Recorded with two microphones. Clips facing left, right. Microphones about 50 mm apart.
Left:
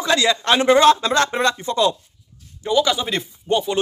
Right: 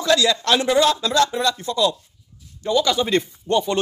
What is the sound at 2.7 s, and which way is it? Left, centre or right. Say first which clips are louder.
Speech: even; centre.